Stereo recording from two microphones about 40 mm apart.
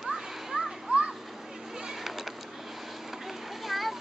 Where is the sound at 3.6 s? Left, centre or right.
Centre.